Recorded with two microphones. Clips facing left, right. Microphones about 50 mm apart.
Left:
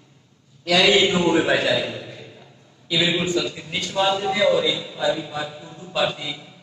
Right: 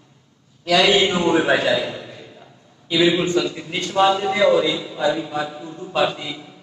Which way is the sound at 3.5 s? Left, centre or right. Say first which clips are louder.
Right 4 dB; right.